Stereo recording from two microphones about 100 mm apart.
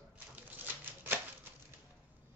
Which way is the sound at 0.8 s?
20° right (ahead or behind).